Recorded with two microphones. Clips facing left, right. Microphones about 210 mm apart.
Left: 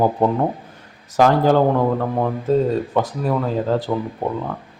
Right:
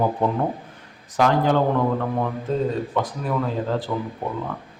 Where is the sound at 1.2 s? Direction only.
40° left (ahead or behind).